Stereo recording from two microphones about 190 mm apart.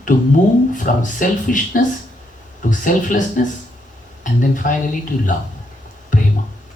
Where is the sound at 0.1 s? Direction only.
45° left (ahead or behind).